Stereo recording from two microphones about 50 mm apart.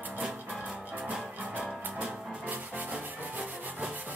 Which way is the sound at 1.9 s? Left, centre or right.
Right.